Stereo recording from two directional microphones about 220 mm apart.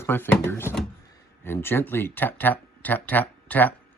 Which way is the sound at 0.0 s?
10° left (ahead or behind).